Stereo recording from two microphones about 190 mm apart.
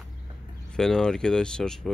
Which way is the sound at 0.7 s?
5° left (ahead or behind).